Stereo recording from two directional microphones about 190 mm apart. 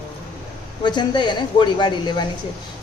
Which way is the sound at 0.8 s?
25° left (ahead or behind).